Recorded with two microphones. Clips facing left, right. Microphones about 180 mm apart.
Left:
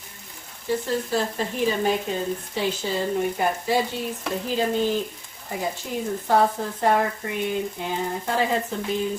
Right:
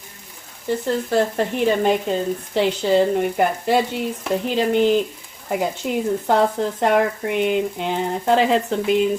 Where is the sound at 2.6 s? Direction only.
70° right (ahead or behind).